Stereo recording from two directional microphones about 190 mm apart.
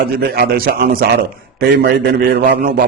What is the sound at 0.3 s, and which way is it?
Speech, 50° right (ahead or behind).